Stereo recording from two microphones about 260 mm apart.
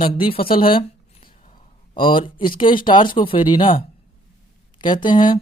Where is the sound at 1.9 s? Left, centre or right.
Centre.